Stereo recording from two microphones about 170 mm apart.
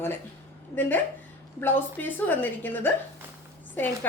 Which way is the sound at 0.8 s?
10° left (ahead or behind).